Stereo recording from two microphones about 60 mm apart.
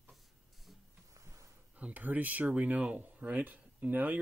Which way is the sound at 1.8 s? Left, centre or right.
Right.